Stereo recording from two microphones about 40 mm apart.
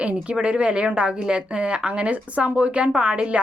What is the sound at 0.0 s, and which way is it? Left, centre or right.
A woman's voice, right.